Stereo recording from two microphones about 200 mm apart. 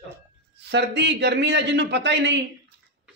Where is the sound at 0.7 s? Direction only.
60° right (ahead or behind).